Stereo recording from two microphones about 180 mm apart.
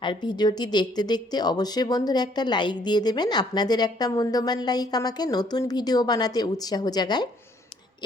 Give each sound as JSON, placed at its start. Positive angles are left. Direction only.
{"t": 0.0, "sound": "speech", "side_deg": 25}